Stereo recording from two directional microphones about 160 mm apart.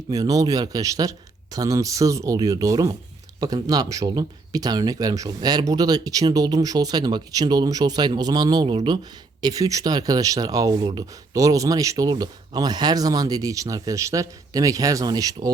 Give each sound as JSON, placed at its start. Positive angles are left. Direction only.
{"t": 0.1, "sound": "speech", "side_deg": -20}